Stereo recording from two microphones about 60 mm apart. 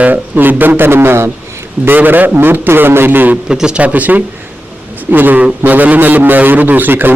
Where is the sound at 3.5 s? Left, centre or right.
Centre.